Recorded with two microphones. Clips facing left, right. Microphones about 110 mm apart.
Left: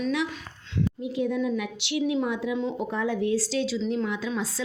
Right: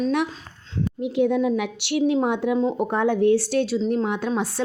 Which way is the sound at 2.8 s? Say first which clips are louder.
Right 8 dB; 65° right (ahead or behind).